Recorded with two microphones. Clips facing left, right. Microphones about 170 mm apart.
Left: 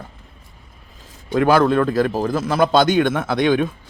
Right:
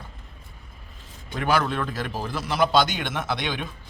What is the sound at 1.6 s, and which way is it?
Speech, 45° left (ahead or behind).